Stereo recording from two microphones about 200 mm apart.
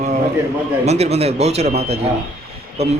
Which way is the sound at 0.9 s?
30° right (ahead or behind).